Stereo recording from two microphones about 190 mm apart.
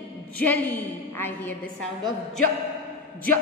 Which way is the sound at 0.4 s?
10° left (ahead or behind).